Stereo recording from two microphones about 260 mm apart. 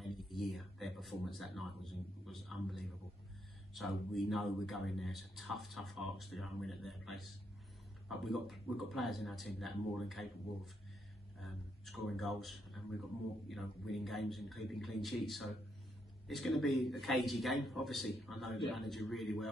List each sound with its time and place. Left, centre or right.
0.1 s speech: centre
11.3 s a sound: centre
13.5 s speech: centre